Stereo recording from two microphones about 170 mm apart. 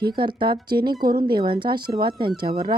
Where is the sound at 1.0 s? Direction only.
60° right (ahead or behind).